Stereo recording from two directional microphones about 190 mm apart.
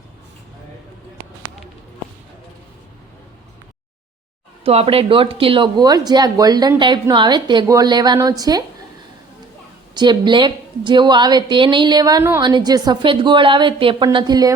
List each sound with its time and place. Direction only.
4.6 s speech: 30° right (ahead or behind)
9.9 s speech: 25° right (ahead or behind)